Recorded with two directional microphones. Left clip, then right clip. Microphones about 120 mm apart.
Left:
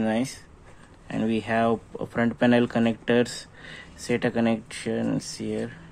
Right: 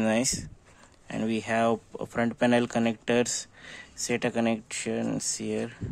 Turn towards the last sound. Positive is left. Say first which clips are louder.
# left 1 dB
turn(degrees=-40)  # may be behind; listen again after turning